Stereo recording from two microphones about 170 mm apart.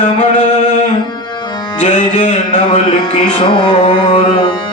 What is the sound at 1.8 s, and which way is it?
Music, 45° left (ahead or behind).